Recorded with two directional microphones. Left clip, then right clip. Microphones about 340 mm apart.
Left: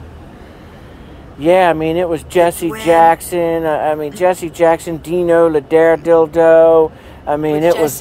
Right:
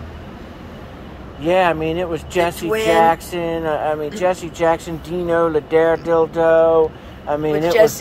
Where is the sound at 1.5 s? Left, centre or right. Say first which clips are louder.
Left 5 dB; left.